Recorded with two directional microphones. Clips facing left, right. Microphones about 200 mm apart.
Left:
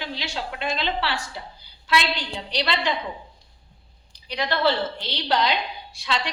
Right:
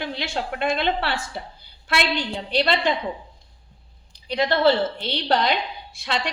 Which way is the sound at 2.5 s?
50° right (ahead or behind).